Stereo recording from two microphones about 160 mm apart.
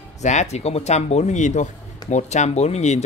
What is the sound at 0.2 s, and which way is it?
Speech, 45° left (ahead or behind).